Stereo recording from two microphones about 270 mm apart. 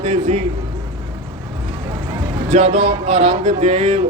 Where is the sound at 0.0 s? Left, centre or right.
Right.